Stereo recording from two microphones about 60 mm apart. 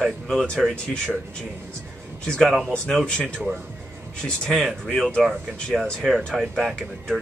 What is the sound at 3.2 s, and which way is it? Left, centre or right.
Speech, centre.